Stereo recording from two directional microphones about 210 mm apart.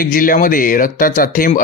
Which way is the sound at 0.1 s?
40° left (ahead or behind).